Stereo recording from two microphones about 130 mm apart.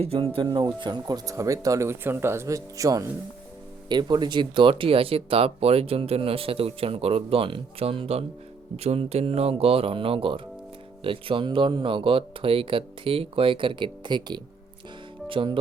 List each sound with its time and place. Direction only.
0.0 s speech: 50° right (ahead or behind)
0.3 s speech: 35° right (ahead or behind)